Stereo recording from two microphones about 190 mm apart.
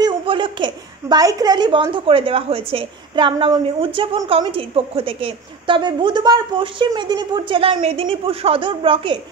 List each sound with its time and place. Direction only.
0.0 s a woman's voice: 25° right (ahead or behind)